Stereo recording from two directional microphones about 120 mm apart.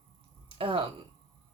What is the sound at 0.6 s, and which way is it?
Speech, 50° right (ahead or behind).